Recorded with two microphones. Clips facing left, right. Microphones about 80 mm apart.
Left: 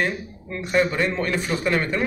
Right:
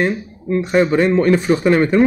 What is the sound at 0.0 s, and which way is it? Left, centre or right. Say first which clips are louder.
A man's voice: right 6 dB; right.